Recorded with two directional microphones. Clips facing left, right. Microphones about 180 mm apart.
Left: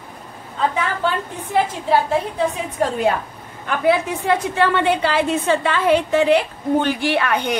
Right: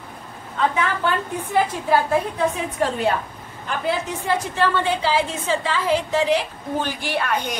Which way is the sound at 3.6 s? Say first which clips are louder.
Left 6 dB; 60° left (ahead or behind).